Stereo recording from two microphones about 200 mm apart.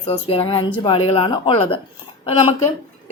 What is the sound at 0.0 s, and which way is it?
A woman's voice, 30° left (ahead or behind).